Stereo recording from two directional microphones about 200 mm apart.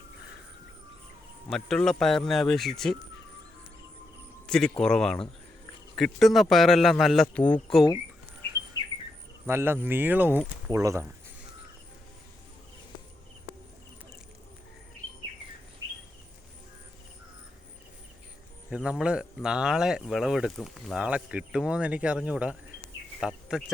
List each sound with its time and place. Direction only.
1.5 s speech: centre (ahead or behind)
4.4 s speech: 5° left (ahead or behind)
8.8 s bird: 20° left (ahead or behind)
9.5 s speech: 10° right (ahead or behind)
18.7 s speech: 5° right (ahead or behind)